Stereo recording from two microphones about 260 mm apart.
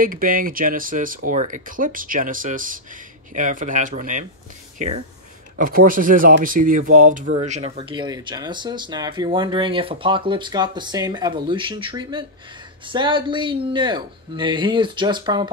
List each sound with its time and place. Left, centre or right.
0.0 s speech: right; by 15.5 s centre